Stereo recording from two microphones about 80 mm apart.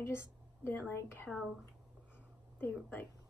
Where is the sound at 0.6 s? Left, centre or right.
Left.